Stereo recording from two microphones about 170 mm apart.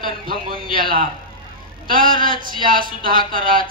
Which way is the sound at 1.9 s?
55° right (ahead or behind).